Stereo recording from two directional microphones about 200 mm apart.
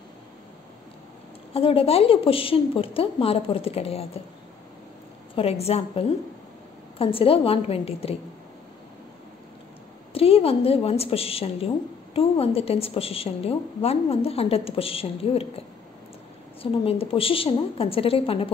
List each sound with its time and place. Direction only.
1.5 s a woman's voice: 30° left (ahead or behind)
5.3 s a woman's voice: 30° left (ahead or behind)
10.1 s a woman's voice: 30° left (ahead or behind)
16.8 s a woman's voice: 30° left (ahead or behind)